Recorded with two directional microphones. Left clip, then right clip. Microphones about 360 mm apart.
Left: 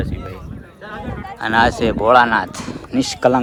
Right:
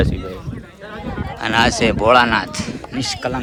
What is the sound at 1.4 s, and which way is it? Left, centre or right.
Speech, centre.